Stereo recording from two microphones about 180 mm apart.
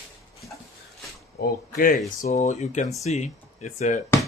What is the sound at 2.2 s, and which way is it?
Speech, 40° left (ahead or behind).